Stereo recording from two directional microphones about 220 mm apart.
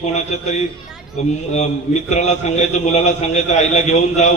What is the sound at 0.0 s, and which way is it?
A man's voice, 30° left (ahead or behind).